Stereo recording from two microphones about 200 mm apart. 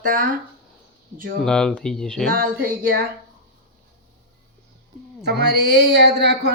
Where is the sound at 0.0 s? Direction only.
45° right (ahead or behind).